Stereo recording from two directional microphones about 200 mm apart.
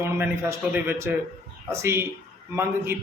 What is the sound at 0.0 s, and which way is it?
A man's voice, 10° right (ahead or behind).